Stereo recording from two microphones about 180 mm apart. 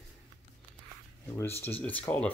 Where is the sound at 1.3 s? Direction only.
15° left (ahead or behind).